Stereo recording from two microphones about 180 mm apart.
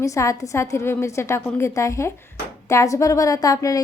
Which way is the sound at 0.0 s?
15° left (ahead or behind).